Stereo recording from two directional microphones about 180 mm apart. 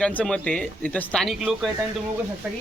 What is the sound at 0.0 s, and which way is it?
Speech, 5° left (ahead or behind).